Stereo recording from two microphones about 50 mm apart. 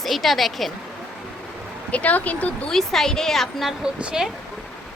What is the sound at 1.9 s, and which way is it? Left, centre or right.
Speech, left.